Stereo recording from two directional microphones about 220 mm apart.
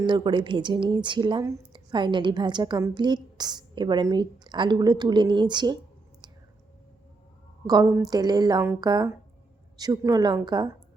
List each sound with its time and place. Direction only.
0.0 s speech: 20° right (ahead or behind)
7.7 s speech: 15° right (ahead or behind)